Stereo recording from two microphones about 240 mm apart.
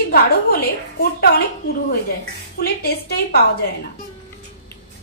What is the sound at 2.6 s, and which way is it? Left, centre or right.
A woman's voice, left.